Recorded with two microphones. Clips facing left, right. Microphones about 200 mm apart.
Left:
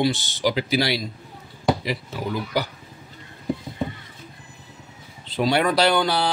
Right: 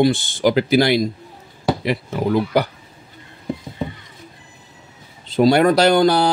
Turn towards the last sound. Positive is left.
turn(degrees=-45)  # may be behind; listen again after turning